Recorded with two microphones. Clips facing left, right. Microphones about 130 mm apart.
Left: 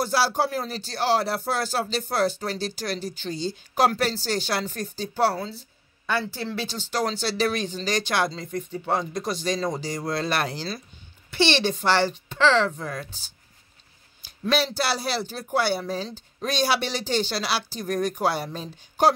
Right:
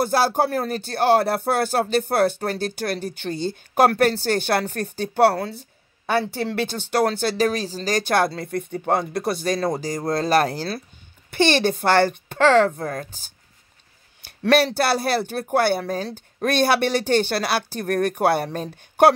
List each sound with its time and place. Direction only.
0.0 s speech: 50° right (ahead or behind)
14.2 s speech: 60° right (ahead or behind)